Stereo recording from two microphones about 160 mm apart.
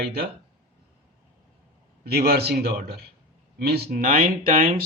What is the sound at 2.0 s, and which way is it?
Speech, 75° right (ahead or behind).